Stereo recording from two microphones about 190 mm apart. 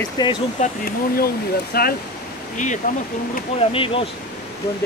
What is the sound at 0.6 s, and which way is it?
Speech, 50° left (ahead or behind).